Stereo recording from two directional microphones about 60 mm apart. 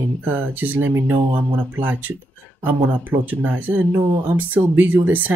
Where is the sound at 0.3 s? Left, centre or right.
Right.